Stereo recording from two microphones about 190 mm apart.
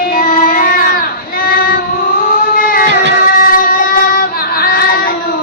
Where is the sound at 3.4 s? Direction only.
50° left (ahead or behind).